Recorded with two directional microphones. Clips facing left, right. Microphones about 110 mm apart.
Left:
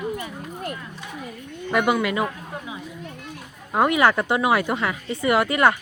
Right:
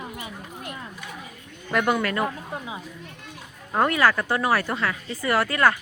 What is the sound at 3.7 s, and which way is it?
Speech, 10° left (ahead or behind).